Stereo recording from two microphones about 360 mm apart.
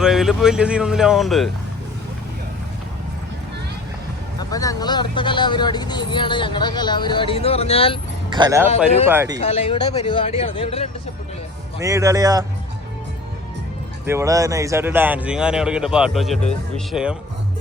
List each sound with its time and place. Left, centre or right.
0.0 s speech: centre
4.4 s speech: centre
8.3 s speech: centre
9.4 s speech: centre
11.8 s speech: centre
14.0 s speech: centre